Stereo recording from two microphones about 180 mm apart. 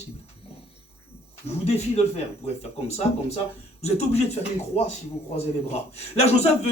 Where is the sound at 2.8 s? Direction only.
35° left (ahead or behind).